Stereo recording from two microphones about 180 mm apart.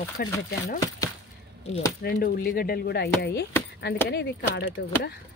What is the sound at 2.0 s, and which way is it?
Speech, 55° left (ahead or behind).